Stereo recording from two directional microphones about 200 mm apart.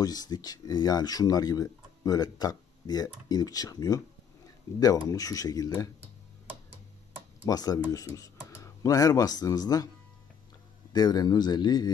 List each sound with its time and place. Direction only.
0.0 s speech: 20° left (ahead or behind)
5.0 s speech: 15° left (ahead or behind)
7.4 s speech: 20° left (ahead or behind)
10.9 s speech: 20° left (ahead or behind)